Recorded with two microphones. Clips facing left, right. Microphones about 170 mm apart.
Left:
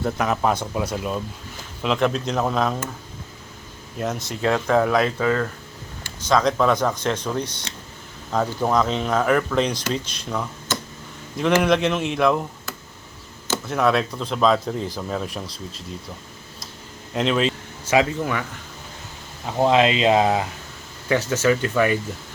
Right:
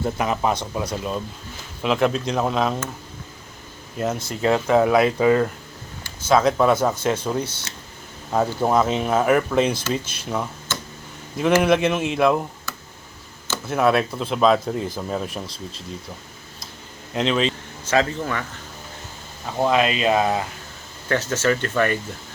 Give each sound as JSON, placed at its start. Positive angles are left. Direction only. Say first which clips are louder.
{"t": 0.2, "sound": "speech", "louder": "left 2 dB", "side_deg": 0}
{"t": 3.9, "sound": "speech", "louder": "right 2 dB", "side_deg": 0}
{"t": 6.2, "sound": "speech", "louder": "right 2 dB", "side_deg": -5}
{"t": 13.7, "sound": "speech", "louder": "right 2 dB", "side_deg": -5}
{"t": 17.2, "sound": "speech", "louder": "even", "side_deg": 5}
{"t": 19.5, "sound": "speech", "louder": "left 2 dB", "side_deg": 20}